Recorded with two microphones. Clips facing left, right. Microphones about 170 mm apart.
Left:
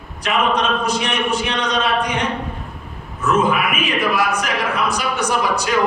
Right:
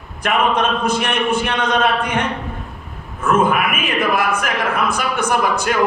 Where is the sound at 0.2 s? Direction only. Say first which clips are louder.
Right 2 dB; 55° right (ahead or behind).